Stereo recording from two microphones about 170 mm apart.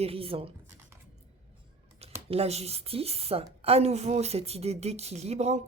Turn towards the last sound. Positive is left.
turn(degrees=-40)  # may be behind; listen again after turning